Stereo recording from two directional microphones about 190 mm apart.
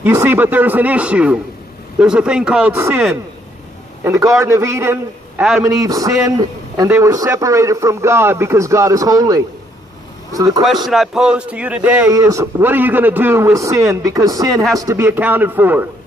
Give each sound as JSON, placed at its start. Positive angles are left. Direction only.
{"t": 0.0, "sound": "speech", "side_deg": -10}
{"t": 4.0, "sound": "a man's voice", "side_deg": -15}
{"t": 10.9, "sound": "speech", "side_deg": 0}